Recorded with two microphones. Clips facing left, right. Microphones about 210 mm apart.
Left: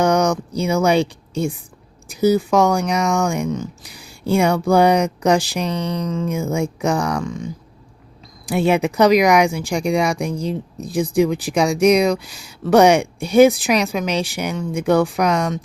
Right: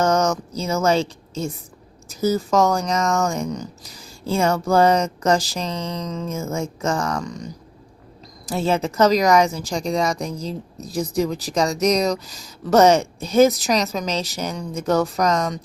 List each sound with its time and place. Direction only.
0.0 s speech: 15° left (ahead or behind)
10.8 s speech: 55° left (ahead or behind)
11.5 s speech: 10° left (ahead or behind)